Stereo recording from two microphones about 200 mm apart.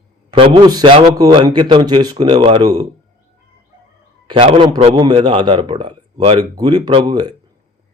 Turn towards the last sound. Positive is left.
turn(degrees=-20)  # may be behind; listen again after turning